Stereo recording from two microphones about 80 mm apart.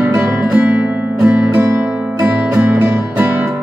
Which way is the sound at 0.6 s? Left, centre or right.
Centre.